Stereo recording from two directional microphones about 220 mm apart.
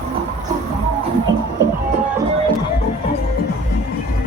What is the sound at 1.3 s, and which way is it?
Music, 55° right (ahead or behind).